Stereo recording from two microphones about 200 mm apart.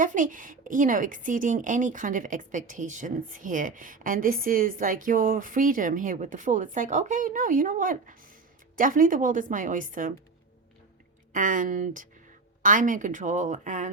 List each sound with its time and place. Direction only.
0.0 s a woman's voice: 40° right (ahead or behind)
11.3 s a woman's voice: 40° right (ahead or behind)